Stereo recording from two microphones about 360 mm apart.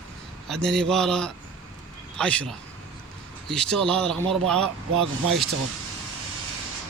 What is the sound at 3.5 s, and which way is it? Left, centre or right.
Speech, centre.